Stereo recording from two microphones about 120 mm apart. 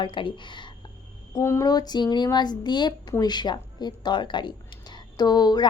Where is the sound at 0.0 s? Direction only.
45° left (ahead or behind).